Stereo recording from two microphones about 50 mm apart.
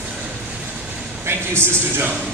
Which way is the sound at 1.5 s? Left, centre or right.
Right.